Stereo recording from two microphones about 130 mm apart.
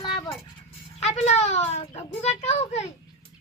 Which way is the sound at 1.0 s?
60° left (ahead or behind).